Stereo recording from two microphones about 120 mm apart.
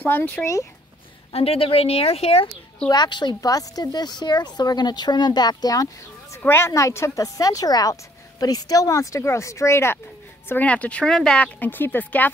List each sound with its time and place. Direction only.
0.0 s speech: 15° left (ahead or behind)
1.3 s a woman's voice: 55° left (ahead or behind)
2.9 s speech: 35° left (ahead or behind)
6.3 s a woman's voice: 20° left (ahead or behind)
10.5 s speech: 10° left (ahead or behind)